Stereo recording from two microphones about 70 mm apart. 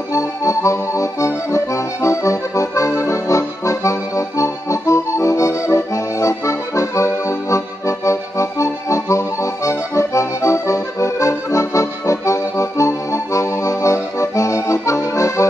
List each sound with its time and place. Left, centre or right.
0.1 s accordion: left